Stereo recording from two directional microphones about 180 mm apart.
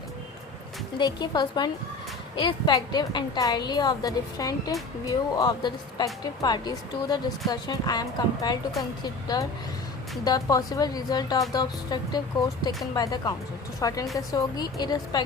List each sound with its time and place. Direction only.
0.9 s a woman's voice: 20° left (ahead or behind)